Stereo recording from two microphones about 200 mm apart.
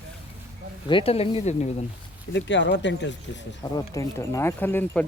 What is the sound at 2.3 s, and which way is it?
Speech, 60° left (ahead or behind).